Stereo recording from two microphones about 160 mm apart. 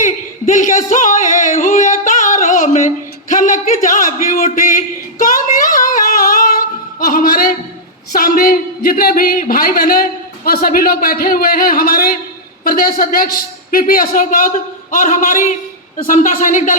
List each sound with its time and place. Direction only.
0.0 s a sound: 55° left (ahead or behind)
5.2 s singing: 60° left (ahead or behind)
8.1 s a man's voice: 65° left (ahead or behind)